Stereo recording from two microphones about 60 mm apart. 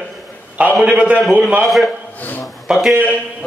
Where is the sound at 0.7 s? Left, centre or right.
Centre.